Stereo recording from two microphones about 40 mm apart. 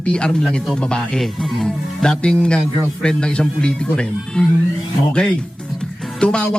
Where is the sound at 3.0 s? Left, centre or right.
Left.